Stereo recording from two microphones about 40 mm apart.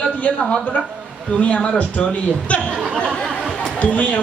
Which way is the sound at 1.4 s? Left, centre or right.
Left.